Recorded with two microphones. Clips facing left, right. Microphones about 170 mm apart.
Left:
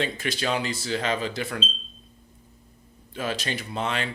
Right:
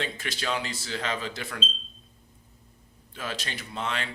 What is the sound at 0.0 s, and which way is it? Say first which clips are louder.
Speech: left 5 dB; 15° left (ahead or behind).